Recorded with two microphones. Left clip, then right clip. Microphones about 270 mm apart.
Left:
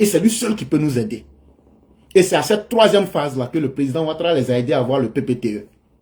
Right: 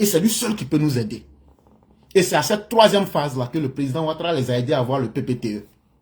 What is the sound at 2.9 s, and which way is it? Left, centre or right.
A man's voice, right.